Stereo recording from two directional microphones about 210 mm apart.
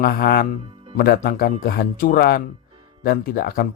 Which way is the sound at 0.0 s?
45° left (ahead or behind).